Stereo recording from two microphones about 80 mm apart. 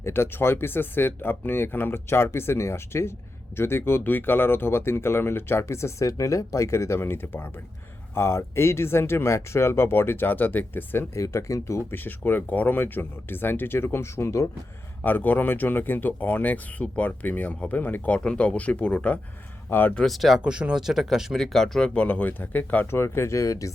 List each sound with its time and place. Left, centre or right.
0.0 s speech: left
11.1 s speech: left
11.9 s speech: left
15.0 s speech: left
20.0 s speech: centre
20.4 s speech: centre; by 23.7 s left